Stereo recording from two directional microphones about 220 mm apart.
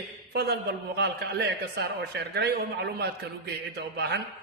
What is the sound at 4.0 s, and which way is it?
Speech, 50° right (ahead or behind).